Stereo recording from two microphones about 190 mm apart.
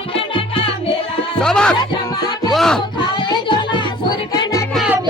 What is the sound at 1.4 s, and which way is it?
Music, 5° left (ahead or behind).